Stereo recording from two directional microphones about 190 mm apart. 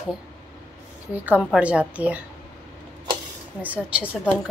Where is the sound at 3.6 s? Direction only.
10° right (ahead or behind).